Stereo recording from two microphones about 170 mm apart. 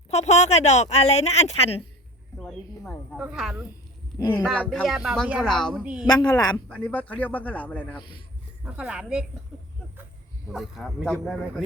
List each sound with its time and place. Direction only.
0.1 s speech: 40° left (ahead or behind)
2.4 s a woman's voice: 5° left (ahead or behind)
6.1 s a woman's voice: 20° left (ahead or behind)
6.7 s speech: 5° left (ahead or behind)
7.9 s a woman's voice: 25° left (ahead or behind)
8.6 s a woman's voice: 5° right (ahead or behind)
9.5 s a sound: centre (ahead or behind)
10.5 s a woman's voice: centre (ahead or behind)